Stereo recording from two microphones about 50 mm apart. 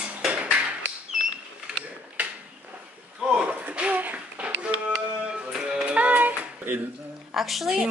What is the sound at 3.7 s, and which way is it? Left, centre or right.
Music, right.